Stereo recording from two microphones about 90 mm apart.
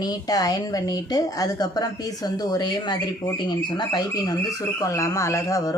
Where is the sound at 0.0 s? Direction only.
45° left (ahead or behind).